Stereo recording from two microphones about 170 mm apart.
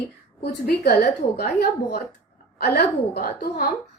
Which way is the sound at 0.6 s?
70° left (ahead or behind).